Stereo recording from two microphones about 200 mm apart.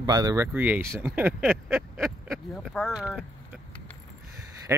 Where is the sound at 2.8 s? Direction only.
5° right (ahead or behind).